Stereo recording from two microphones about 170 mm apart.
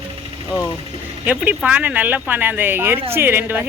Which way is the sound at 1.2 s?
10° right (ahead or behind).